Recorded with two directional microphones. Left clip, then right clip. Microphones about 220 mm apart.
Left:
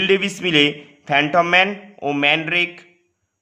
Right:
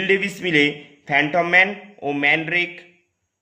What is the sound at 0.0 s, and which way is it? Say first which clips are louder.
A man's voice: left 2 dB; 25° left (ahead or behind).